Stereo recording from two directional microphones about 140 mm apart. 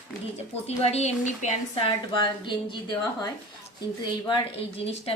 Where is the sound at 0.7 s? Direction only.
50° left (ahead or behind).